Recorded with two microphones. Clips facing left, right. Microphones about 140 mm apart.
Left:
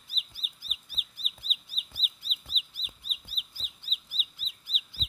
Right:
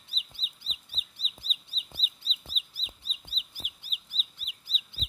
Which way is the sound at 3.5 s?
15° right (ahead or behind).